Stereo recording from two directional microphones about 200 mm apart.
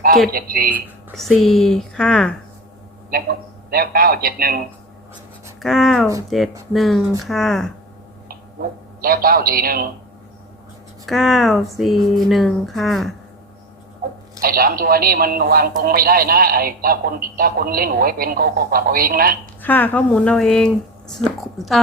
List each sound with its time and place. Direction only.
0.3 s speech: 45° right (ahead or behind)
1.1 s speech: centre (ahead or behind)
3.1 s speech: 45° right (ahead or behind)
5.6 s speech: centre (ahead or behind)
9.0 s speech: 45° right (ahead or behind)
11.0 s speech: centre (ahead or behind)
14.4 s speech: 45° right (ahead or behind)
19.6 s speech: 10° left (ahead or behind)